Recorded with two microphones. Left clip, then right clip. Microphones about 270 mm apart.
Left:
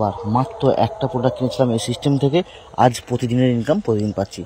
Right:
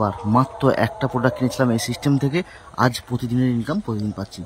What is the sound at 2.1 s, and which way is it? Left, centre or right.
Speech, centre.